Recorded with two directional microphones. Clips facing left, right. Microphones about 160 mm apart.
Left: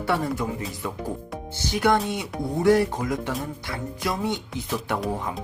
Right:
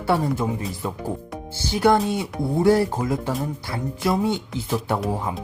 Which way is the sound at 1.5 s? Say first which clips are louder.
Right 3 dB; 30° right (ahead or behind).